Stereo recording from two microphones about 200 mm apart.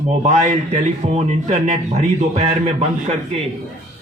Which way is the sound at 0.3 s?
35° right (ahead or behind).